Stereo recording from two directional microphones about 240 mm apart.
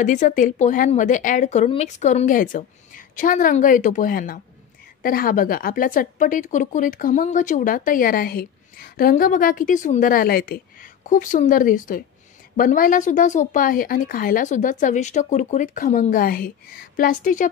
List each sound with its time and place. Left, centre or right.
0.0 s a woman's voice: left